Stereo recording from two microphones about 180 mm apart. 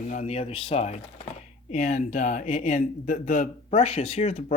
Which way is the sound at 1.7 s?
45° left (ahead or behind).